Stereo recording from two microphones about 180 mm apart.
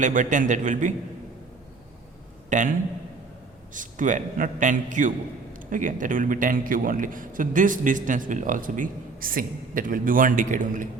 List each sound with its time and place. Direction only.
0.0 s a man's voice: 45° right (ahead or behind)
2.5 s a man's voice: 45° right (ahead or behind)
3.8 s a man's voice: 45° right (ahead or behind)